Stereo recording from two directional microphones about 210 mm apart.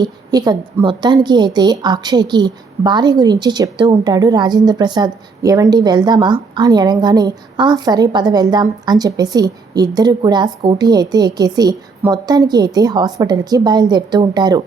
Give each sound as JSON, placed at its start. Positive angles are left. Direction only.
{"t": 0.0, "sound": "a woman's voice", "side_deg": -20}